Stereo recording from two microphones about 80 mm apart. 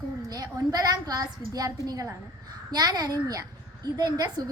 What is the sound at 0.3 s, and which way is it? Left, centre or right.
A woman's voice, right.